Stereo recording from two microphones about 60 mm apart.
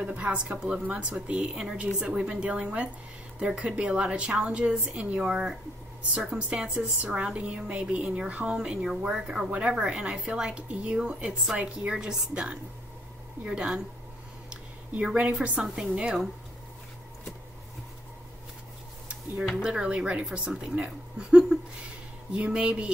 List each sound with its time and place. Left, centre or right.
0.0 s a woman's voice: right
7.0 s a woman's voice: right
8.5 s speech: centre
15.9 s a woman's voice: centre
19.6 s speech: centre